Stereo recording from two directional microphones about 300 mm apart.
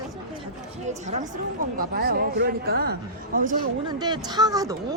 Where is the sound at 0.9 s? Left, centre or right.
Right.